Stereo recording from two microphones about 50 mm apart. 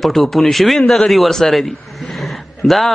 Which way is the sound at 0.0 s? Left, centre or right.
Centre.